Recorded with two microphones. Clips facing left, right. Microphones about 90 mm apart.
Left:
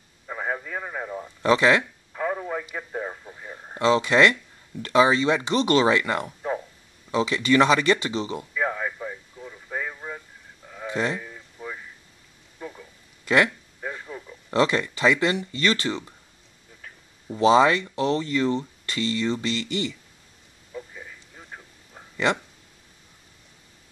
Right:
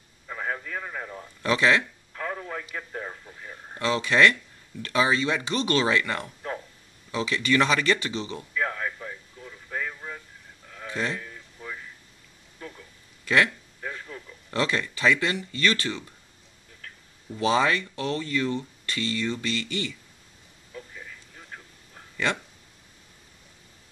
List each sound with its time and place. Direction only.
0.3 s radio: 15° left (ahead or behind)
1.5 s speech: 25° left (ahead or behind)
1.8 s radio: 15° left (ahead or behind)
4.8 s speech: 25° left (ahead or behind)
7.1 s speech: 30° left (ahead or behind)
8.4 s radio: 15° left (ahead or behind)
10.7 s a sound: 20° left (ahead or behind)
14.5 s speech: 25° left (ahead or behind)
17.3 s speech: 25° left (ahead or behind)
20.7 s a sound: 15° left (ahead or behind)